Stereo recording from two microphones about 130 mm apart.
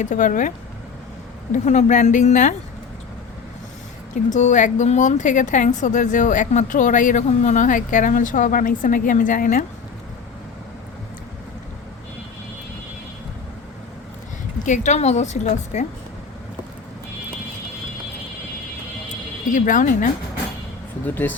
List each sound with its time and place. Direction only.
0.0 s speech: 80° left
1.5 s a woman's voice: 70° left (ahead or behind)
4.1 s a woman's voice: 70° left (ahead or behind); by 9.6 s 90° left
14.6 s a woman's voice: 70° left (ahead or behind)
19.0 s a sound: 85° left
21.0 s speech: 15° left (ahead or behind)